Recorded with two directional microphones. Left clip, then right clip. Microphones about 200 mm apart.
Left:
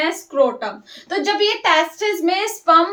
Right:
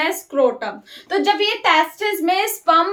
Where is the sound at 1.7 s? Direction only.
20° right (ahead or behind).